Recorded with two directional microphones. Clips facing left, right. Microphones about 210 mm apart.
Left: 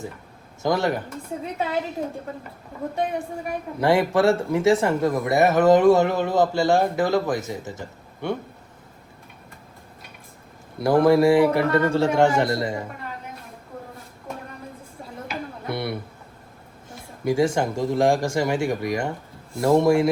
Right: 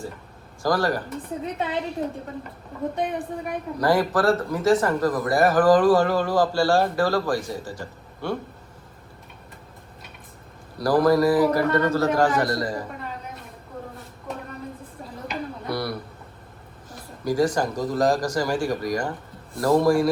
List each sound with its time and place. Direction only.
0.6 s speech: 25° left (ahead or behind)
1.1 s a woman's voice: centre (ahead or behind)
3.8 s speech: 25° left (ahead or behind)
10.8 s speech: 25° left (ahead or behind)
15.6 s a sound: 25° left (ahead or behind)
17.2 s speech: 25° left (ahead or behind)